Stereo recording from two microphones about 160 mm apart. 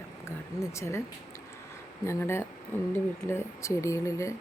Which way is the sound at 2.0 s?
15° left (ahead or behind).